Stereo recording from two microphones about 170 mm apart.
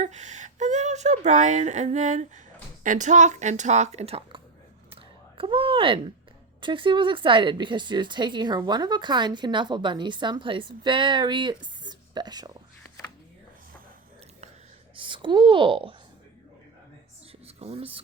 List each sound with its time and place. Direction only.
0.0 s speech: 45° right (ahead or behind)
5.4 s speech: 30° right (ahead or behind)
14.9 s a woman's voice: 30° right (ahead or behind)
17.4 s a sound: 35° right (ahead or behind)